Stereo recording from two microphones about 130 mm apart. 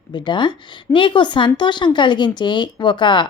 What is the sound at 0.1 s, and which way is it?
A woman's voice, 35° left (ahead or behind).